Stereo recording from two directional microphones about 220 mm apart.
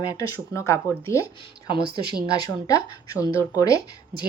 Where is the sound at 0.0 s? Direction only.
15° left (ahead or behind).